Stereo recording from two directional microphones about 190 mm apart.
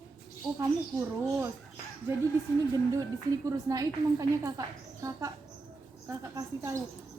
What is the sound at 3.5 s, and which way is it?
Speech, 15° right (ahead or behind).